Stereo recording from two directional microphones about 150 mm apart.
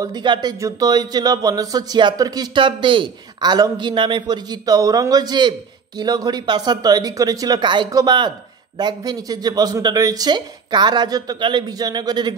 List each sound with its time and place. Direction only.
0.0 s speech: 30° right (ahead or behind)